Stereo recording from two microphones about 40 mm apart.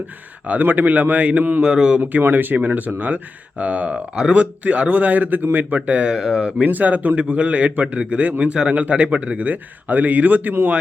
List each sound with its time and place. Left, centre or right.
0.6 s speech: right
1.6 s speech: right
2.0 s speech: right
4.1 s speech: right
4.6 s speech: right
5.7 s speech: right
6.1 s speech: centre
6.7 s speech: right